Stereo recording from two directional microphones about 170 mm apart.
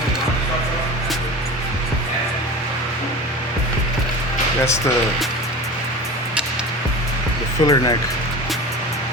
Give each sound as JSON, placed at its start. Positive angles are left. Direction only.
{"t": 7.6, "sound": "speech", "side_deg": 25}